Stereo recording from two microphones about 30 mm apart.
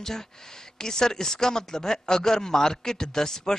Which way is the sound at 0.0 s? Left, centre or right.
Centre.